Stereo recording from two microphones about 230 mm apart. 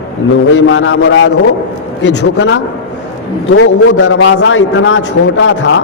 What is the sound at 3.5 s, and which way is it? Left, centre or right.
A man's voice, left.